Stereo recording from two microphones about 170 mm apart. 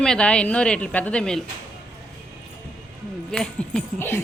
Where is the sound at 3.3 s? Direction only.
5° left (ahead or behind).